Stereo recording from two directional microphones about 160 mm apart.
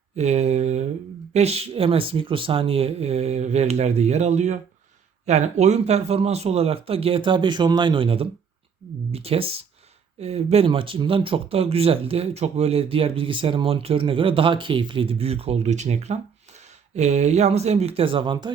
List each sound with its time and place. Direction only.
0.2 s mantra: 45° right (ahead or behind)
1.3 s speech: 40° right (ahead or behind)